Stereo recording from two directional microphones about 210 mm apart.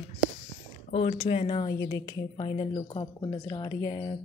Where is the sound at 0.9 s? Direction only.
30° left (ahead or behind).